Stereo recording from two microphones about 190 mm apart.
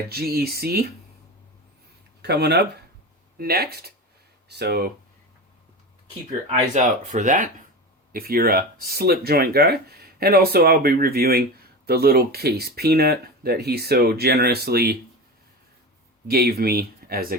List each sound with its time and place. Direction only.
0.1 s speech: 55° right (ahead or behind)
2.2 s speech: 60° right (ahead or behind)
6.7 s speech: 40° right (ahead or behind)
16.2 s speech: 55° right (ahead or behind)